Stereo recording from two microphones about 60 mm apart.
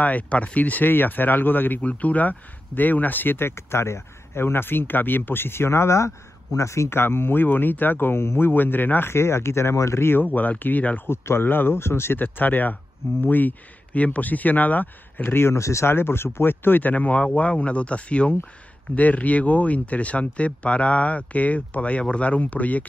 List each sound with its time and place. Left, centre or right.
0.0 s speech: left
10.2 s speech: left
11.1 s speech: left
15.3 s speech: left